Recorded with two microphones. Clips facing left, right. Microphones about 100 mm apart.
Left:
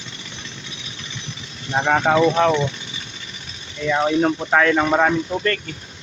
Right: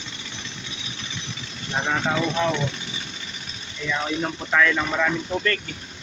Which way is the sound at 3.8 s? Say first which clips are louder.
Left 8 dB; 40° left (ahead or behind).